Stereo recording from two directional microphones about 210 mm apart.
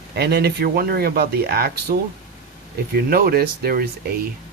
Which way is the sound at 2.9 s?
45° right (ahead or behind).